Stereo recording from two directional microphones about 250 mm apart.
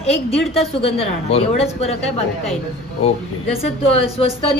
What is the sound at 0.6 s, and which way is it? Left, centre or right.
A woman's voice, left.